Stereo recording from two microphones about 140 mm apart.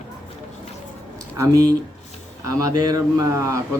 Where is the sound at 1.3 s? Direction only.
25° right (ahead or behind).